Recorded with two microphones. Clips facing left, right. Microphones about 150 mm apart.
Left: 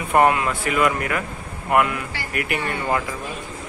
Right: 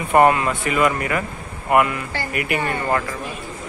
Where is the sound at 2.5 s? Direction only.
55° right (ahead or behind).